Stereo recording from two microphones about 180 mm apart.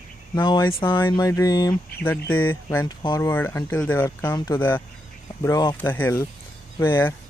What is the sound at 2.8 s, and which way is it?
Speech, 20° left (ahead or behind).